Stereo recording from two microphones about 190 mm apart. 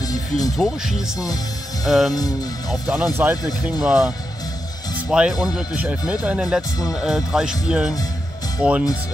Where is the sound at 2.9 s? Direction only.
10° right (ahead or behind).